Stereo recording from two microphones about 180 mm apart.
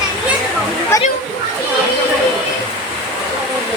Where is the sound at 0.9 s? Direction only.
20° left (ahead or behind).